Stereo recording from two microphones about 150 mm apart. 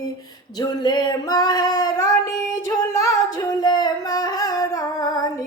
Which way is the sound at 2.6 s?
20° left (ahead or behind).